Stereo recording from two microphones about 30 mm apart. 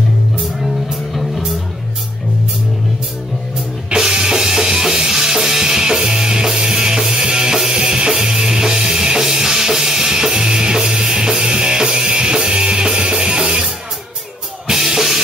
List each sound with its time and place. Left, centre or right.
3.9 s music: right
7.5 s music: centre
7.8 s music: right
14.7 s drum kit: centre